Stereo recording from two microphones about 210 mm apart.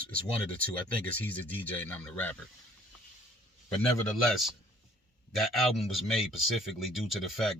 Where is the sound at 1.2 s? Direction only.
5° left (ahead or behind).